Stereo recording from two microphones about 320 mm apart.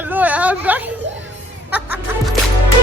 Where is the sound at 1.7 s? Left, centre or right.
Centre.